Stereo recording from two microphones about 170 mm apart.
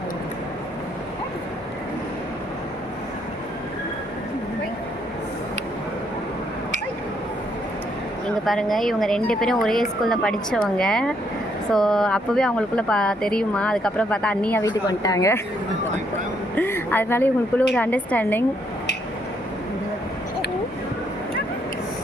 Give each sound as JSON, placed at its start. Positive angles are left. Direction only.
{"t": 8.4, "sound": "speech", "side_deg": 0}
{"t": 14.6, "sound": "a woman's voice", "side_deg": 20}
{"t": 16.6, "sound": "speech", "side_deg": 15}